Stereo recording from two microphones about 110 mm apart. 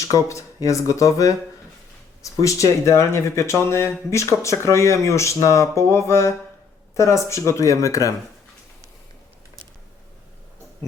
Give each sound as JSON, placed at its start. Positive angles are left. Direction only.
{"t": 0.1, "sound": "speech", "side_deg": 30}
{"t": 2.4, "sound": "speech", "side_deg": 30}